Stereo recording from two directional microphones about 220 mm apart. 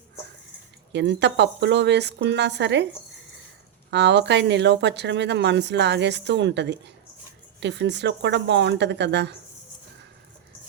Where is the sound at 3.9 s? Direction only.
50° right (ahead or behind).